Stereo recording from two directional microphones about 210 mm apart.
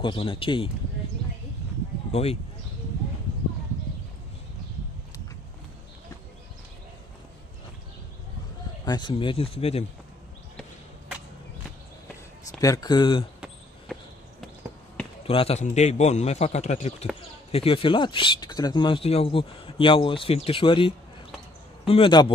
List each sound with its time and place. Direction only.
0.0 s speech: 25° left (ahead or behind)
2.1 s speech: 30° left (ahead or behind)
8.8 s speech: 20° left (ahead or behind)
12.5 s speech: 15° left (ahead or behind)
15.2 s a man's voice: 30° left (ahead or behind)